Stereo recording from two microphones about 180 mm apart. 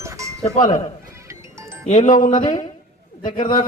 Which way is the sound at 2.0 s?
45° left (ahead or behind).